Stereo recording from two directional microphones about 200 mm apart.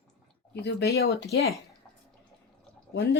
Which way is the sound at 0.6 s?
55° left (ahead or behind).